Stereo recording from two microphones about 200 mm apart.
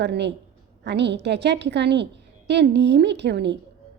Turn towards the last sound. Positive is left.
turn(degrees=-60)  # may be behind; listen again after turning